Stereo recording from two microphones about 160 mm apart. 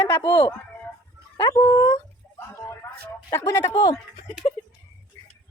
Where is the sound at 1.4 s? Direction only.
15° left (ahead or behind).